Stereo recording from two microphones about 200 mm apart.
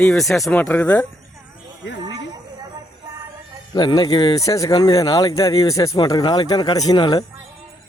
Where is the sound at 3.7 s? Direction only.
20° left (ahead or behind).